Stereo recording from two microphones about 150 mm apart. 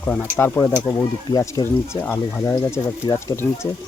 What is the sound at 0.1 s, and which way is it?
Speech, 15° left (ahead or behind).